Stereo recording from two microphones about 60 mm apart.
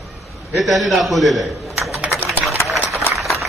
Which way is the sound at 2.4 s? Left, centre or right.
Right.